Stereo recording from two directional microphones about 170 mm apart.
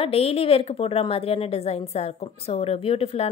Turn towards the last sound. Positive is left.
turn(degrees=35)  # may be behind; listen again after turning